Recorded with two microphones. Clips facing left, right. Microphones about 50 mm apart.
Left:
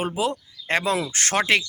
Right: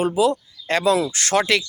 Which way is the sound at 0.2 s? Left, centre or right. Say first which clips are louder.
Right 6 dB; left.